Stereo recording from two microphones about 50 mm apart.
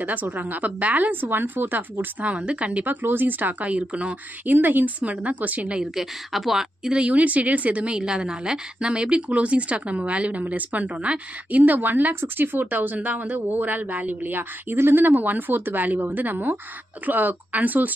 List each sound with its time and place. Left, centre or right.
0.0 s a woman's voice: right
2.2 s a woman's voice: right
4.5 s a woman's voice: right
5.8 s a woman's voice: centre
6.9 s a woman's voice: right